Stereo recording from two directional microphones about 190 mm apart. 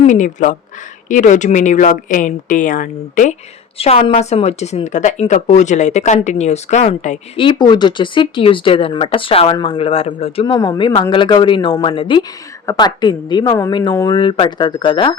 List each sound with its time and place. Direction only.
0.0 s a woman's voice: 40° left (ahead or behind)
3.8 s a woman's voice: 30° left (ahead or behind)
7.4 s speech: 25° left (ahead or behind)
10.4 s speech: 20° left (ahead or behind)